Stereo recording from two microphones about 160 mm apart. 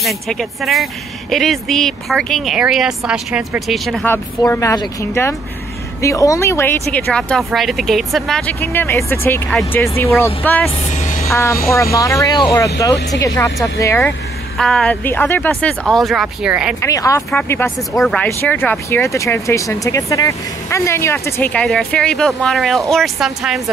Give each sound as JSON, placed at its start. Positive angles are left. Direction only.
{"t": 0.0, "sound": "speech", "side_deg": 0}
{"t": 4.4, "sound": "speech", "side_deg": 20}
{"t": 10.8, "sound": "music", "side_deg": 45}
{"t": 11.2, "sound": "speech", "side_deg": 20}
{"t": 14.6, "sound": "speech", "side_deg": 5}
{"t": 16.8, "sound": "speech", "side_deg": 20}
{"t": 17.6, "sound": "speech", "side_deg": 5}